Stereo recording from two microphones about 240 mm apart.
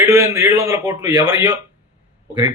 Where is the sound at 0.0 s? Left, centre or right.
Centre.